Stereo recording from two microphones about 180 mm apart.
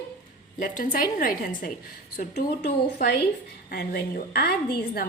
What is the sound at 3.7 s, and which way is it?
Speech, 60° left (ahead or behind).